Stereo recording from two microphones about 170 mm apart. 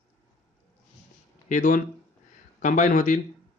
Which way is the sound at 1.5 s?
50° left (ahead or behind).